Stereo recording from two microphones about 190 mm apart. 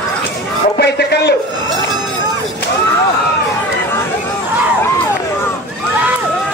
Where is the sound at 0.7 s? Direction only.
60° left (ahead or behind).